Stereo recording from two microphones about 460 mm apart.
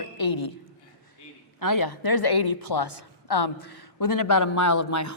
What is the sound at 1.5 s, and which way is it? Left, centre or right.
A woman's voice, left.